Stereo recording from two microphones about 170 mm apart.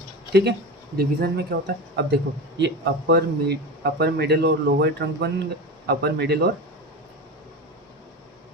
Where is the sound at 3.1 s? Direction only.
70° right (ahead or behind).